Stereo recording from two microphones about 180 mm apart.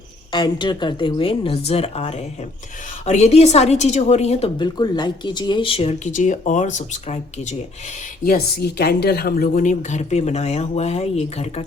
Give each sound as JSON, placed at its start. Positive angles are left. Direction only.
{"t": 0.3, "sound": "a woman's voice", "side_deg": 25}
{"t": 8.2, "sound": "a woman's voice", "side_deg": 60}